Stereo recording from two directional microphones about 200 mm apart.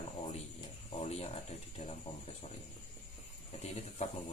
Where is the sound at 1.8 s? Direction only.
35° left (ahead or behind).